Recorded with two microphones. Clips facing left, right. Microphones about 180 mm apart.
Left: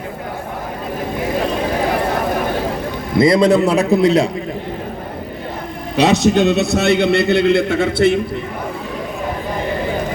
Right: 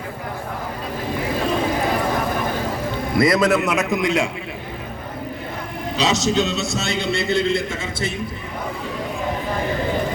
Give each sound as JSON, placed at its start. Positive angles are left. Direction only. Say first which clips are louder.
{"t": 3.2, "sound": "a man's voice", "louder": "left 5 dB", "side_deg": 25}
{"t": 6.0, "sound": "a man's voice", "louder": "left 7 dB", "side_deg": 60}